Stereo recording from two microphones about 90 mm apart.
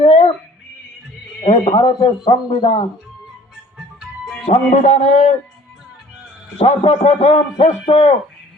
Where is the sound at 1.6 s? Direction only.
55° left (ahead or behind).